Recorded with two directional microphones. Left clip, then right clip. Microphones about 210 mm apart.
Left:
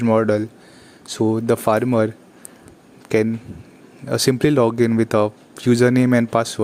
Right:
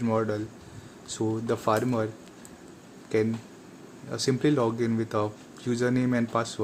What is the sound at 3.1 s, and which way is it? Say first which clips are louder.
Speech: left 8 dB; 40° left (ahead or behind).